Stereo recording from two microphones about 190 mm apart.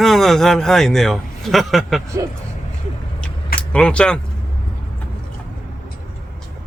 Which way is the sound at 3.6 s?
5° left (ahead or behind).